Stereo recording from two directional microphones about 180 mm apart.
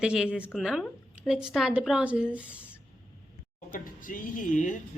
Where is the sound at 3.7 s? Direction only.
50° left (ahead or behind).